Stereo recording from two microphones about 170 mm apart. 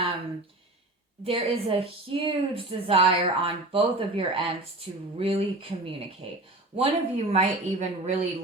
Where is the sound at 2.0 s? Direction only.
30° right (ahead or behind).